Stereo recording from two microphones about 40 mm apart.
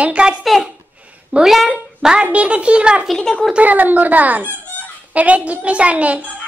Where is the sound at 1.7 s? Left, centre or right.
Centre.